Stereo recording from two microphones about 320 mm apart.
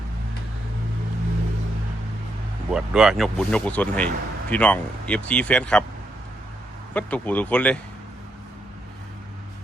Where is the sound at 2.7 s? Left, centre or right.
Centre.